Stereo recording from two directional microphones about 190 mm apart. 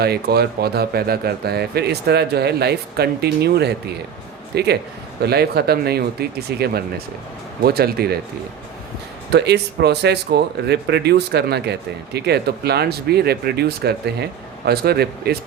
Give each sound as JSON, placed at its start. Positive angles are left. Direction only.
{"t": 0.0, "sound": "speech", "side_deg": -55}
{"t": 9.3, "sound": "speech", "side_deg": -60}